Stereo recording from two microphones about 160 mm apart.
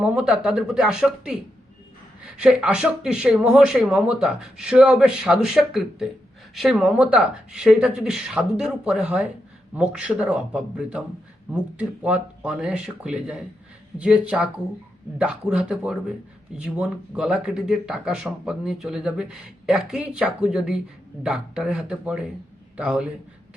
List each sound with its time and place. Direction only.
0.0 s speech: 5° right (ahead or behind)